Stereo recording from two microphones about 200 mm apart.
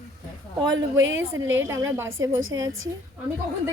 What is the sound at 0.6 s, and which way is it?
A woman's voice, 20° right (ahead or behind).